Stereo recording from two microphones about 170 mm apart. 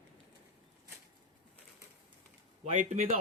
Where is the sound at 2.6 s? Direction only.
45° right (ahead or behind).